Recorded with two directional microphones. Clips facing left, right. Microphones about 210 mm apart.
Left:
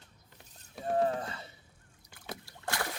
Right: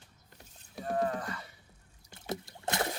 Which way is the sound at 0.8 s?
25° left (ahead or behind).